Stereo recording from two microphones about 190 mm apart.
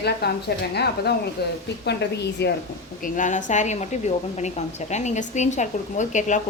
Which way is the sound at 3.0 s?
45° left (ahead or behind).